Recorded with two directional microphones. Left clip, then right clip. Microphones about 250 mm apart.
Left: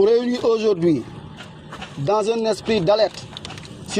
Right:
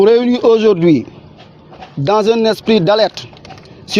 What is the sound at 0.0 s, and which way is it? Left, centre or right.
Speech, right.